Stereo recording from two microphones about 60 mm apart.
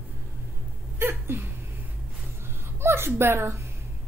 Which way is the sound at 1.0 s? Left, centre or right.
Right.